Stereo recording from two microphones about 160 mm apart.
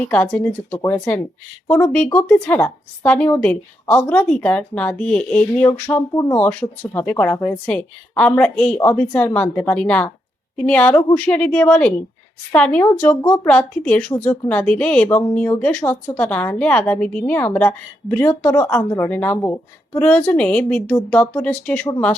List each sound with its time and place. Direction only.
0.0 s a woman's voice: 10° left (ahead or behind)
12.8 s a woman's voice: 20° left (ahead or behind)